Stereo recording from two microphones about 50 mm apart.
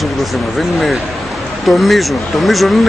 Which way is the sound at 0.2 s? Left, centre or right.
Centre.